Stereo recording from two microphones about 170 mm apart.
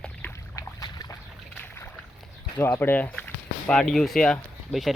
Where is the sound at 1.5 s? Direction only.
10° left (ahead or behind).